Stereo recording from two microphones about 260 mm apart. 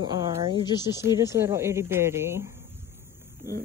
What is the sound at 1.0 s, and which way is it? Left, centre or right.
Speech, centre.